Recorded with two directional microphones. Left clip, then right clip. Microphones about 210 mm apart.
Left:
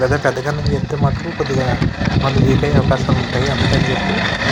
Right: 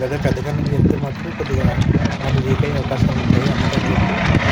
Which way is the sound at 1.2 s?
40° left (ahead or behind).